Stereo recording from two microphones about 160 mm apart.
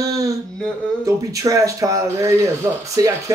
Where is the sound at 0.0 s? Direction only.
20° right (ahead or behind).